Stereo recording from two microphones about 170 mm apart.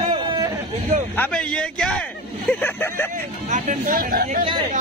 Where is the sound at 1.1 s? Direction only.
10° left (ahead or behind).